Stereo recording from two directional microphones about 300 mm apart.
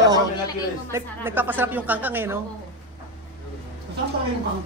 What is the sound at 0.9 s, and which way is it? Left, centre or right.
Speech, centre.